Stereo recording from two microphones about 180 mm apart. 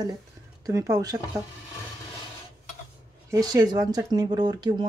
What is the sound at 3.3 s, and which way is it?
Speech, 20° right (ahead or behind).